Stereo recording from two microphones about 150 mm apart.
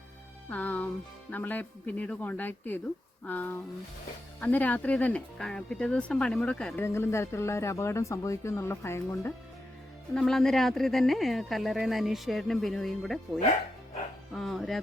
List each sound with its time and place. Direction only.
0.5 s speech: 10° left (ahead or behind)
6.8 s speech: 15° left (ahead or behind)
10.2 s speech: 5° left (ahead or behind)